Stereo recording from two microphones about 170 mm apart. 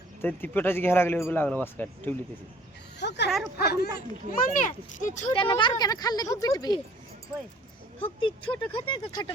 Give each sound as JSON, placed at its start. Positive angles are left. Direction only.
{"t": 0.2, "sound": "a man's voice", "side_deg": 10}
{"t": 3.0, "sound": "speech", "side_deg": 85}
{"t": 3.2, "sound": "speech", "side_deg": 0}
{"t": 3.6, "sound": "speech", "side_deg": 70}
{"t": 4.3, "sound": "speech", "side_deg": 55}
{"t": 5.3, "sound": "speech", "side_deg": 30}
{"t": 8.2, "sound": "speech", "side_deg": 30}